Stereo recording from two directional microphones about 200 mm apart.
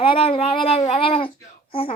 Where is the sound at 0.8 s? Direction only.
30° left (ahead or behind).